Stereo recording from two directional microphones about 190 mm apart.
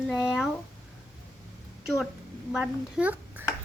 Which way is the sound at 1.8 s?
Centre (ahead or behind).